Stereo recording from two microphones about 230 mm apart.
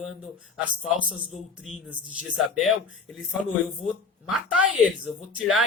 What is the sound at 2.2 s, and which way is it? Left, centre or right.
Speech, centre.